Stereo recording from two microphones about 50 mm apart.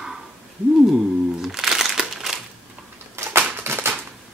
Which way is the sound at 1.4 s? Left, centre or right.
Centre.